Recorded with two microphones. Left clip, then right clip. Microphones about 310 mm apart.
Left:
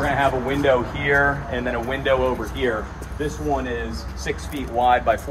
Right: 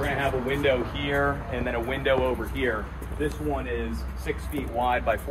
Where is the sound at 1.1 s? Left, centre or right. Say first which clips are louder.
Left 7 dB; left.